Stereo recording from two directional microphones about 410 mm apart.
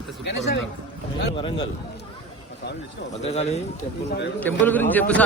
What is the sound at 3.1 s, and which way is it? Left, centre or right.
Speech, centre.